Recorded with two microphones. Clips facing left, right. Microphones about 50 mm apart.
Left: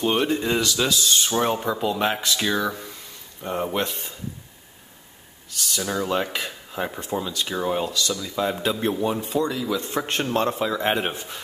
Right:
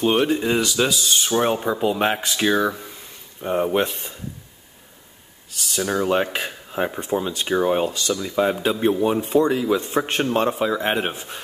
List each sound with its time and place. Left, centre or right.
0.0 s speech: centre
5.8 s speech: centre
8.6 s speech: centre
9.2 s speech: right
9.9 s speech: centre